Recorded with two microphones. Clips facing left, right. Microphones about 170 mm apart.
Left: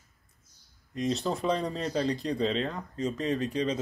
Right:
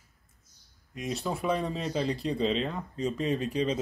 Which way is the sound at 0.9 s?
10° right (ahead or behind).